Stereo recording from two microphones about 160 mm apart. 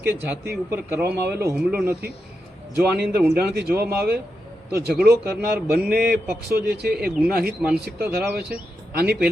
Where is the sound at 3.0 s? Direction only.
75° right (ahead or behind).